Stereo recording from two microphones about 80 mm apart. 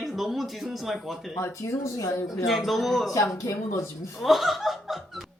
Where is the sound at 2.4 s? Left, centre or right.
Centre.